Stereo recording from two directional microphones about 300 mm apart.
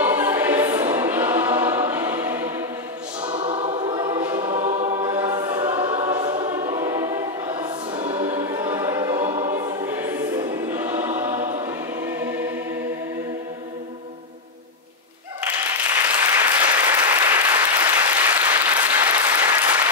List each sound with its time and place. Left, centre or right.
0.0 s choir: centre
3.3 s choir: centre
8.0 s music: centre
8.3 s choir: centre
11.3 s choir: right
11.6 s choir: centre
15.4 s applause: centre